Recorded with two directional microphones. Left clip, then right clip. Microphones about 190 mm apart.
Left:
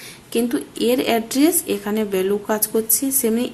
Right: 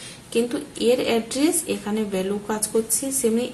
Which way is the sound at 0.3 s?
40° left (ahead or behind).